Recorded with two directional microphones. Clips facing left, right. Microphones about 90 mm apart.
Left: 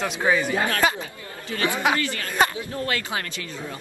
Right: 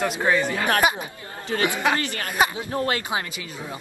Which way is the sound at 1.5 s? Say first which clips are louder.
Right 3 dB; 40° right (ahead or behind).